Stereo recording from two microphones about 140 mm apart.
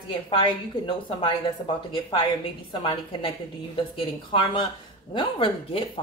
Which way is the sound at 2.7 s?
35° left (ahead or behind).